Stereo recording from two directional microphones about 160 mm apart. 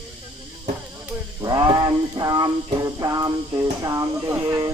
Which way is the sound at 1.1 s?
25° right (ahead or behind).